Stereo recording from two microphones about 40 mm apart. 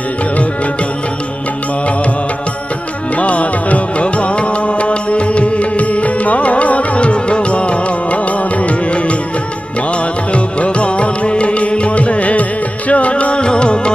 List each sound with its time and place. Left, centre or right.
3.2 s music: left
10.3 s music: left